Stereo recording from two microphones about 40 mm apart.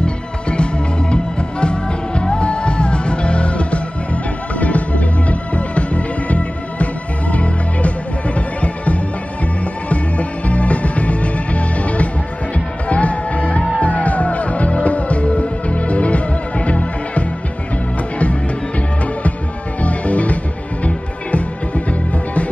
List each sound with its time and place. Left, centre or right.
0.0 s music: left
19.8 s music: left